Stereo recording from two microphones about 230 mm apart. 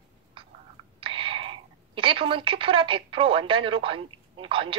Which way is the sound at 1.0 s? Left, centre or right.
Right.